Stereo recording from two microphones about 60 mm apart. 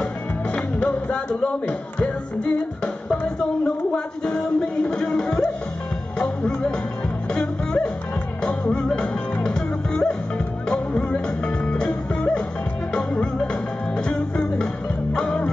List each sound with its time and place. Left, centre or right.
0.6 s speech: left
3.6 s music: centre
6.1 s speech: centre
7.3 s music: centre